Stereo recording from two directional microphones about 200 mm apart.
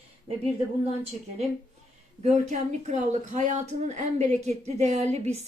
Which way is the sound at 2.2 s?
35° right (ahead or behind).